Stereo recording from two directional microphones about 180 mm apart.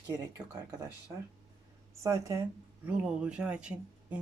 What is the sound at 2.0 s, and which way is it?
Speech, 15° right (ahead or behind).